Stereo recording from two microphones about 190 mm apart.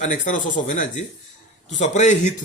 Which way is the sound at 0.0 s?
40° left (ahead or behind).